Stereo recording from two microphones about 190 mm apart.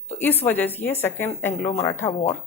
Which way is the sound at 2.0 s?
35° left (ahead or behind).